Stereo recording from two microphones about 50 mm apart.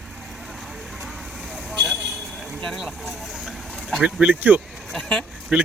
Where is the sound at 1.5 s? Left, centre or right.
Centre.